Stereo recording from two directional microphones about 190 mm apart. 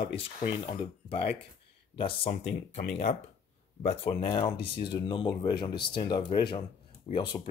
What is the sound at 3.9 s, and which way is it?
Speech, 35° left (ahead or behind).